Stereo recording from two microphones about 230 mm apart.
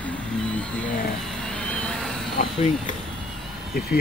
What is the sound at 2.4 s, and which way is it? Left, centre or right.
Speech, left.